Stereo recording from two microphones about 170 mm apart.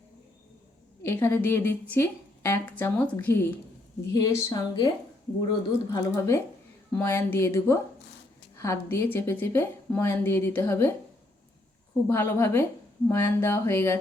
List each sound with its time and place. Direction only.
1.0 s a woman's voice: 15° left (ahead or behind)
12.0 s a woman's voice: 15° left (ahead or behind)